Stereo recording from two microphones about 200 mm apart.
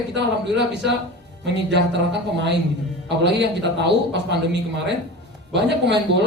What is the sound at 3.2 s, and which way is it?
A man's voice, 60° right (ahead or behind).